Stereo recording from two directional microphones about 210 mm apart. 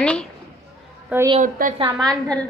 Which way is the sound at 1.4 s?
35° right (ahead or behind).